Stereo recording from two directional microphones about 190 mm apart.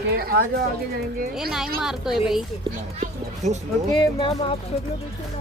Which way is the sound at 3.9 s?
25° left (ahead or behind).